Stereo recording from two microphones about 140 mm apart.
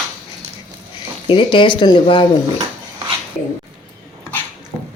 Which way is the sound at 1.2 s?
35° left (ahead or behind).